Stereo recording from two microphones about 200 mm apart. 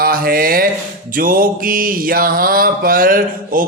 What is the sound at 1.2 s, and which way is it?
Mantra, 45° right (ahead or behind).